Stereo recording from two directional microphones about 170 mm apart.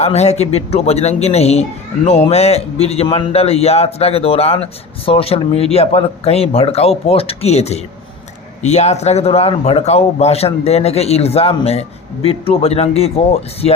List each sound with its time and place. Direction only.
0.0 s a man's voice: 40° left (ahead or behind)